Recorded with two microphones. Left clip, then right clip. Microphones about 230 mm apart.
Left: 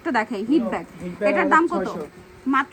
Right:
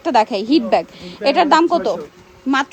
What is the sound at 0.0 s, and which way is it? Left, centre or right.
Speech, centre.